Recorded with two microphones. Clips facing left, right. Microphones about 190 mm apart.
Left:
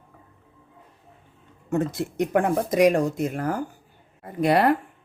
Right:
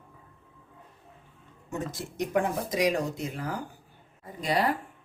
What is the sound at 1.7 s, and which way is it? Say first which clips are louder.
Speech: left 10 dB; 55° left (ahead or behind).